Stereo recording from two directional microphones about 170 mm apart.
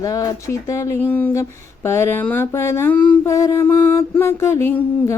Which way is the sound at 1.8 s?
15° left (ahead or behind).